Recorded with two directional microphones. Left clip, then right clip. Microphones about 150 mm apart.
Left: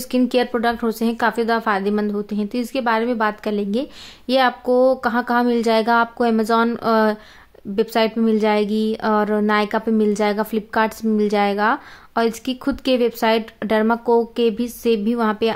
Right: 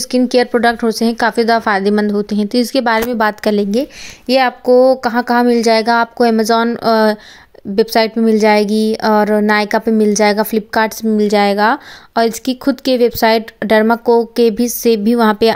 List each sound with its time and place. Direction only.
0.1 s a woman's voice: 25° right (ahead or behind); by 3.6 s 45° right (ahead or behind)
4.3 s a woman's voice: 30° right (ahead or behind)